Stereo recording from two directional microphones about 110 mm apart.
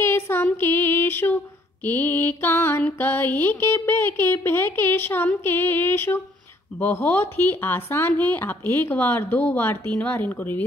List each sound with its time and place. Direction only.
0.0 s female singing: 20° left (ahead or behind)
0.5 s mantra: 20° left (ahead or behind)
3.3 s speech: 20° left (ahead or behind)